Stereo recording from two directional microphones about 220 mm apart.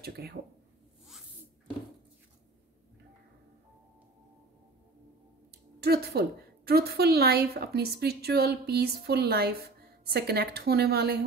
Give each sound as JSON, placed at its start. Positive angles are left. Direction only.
{"t": 0.0, "sound": "a woman's voice", "side_deg": -45}
{"t": 5.8, "sound": "a woman's voice", "side_deg": -45}